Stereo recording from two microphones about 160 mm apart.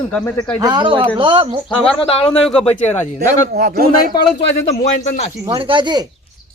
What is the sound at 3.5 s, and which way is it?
Speech, 70° right (ahead or behind).